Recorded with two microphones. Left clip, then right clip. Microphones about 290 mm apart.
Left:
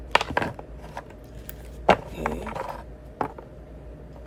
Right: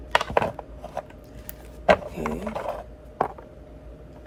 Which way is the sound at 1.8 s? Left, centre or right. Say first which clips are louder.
Right 1 dB; centre.